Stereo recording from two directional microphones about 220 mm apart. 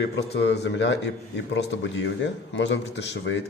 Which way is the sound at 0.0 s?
50° left (ahead or behind).